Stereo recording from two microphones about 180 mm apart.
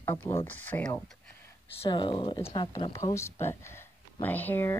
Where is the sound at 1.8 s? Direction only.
30° left (ahead or behind); by 4.8 s 10° left (ahead or behind).